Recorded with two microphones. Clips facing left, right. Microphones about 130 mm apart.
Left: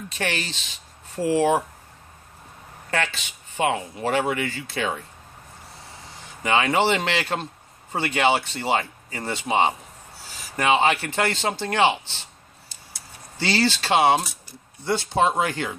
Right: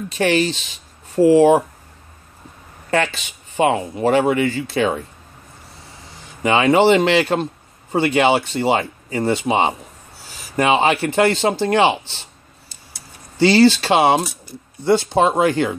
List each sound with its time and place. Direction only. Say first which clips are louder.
0.2 s speech: right 11 dB; 15° right (ahead or behind)
2.9 s speech: right 7 dB; 25° right (ahead or behind)
6.4 s speech: right 7 dB; 20° right (ahead or behind)
13.4 s speech: right 10 dB; 15° right (ahead or behind)